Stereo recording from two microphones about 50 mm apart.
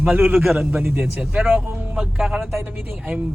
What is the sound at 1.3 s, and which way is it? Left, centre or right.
Speech, right.